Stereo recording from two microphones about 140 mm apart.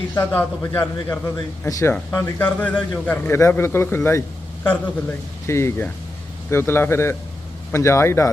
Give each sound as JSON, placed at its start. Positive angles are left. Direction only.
{"t": 0.1, "sound": "a man's voice", "side_deg": 15}